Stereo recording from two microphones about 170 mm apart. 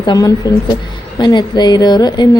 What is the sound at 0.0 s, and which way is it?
A woman's voice, 25° left (ahead or behind).